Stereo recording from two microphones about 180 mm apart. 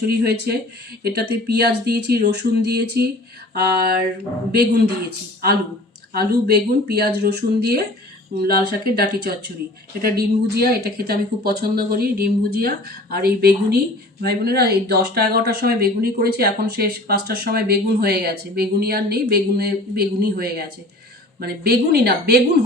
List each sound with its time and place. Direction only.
0.1 s speech: 60° right (ahead or behind)